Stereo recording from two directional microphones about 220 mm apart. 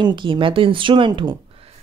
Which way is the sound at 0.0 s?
20° right (ahead or behind).